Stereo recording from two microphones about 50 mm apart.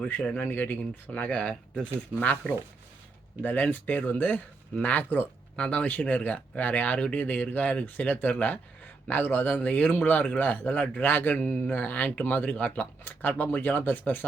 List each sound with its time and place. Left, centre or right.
0.3 s speech: left
1.1 s speech: left
5.0 s speech: left
5.5 s speech: centre
5.8 s speech: left